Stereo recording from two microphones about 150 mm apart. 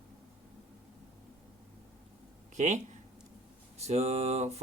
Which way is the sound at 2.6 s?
50° right (ahead or behind).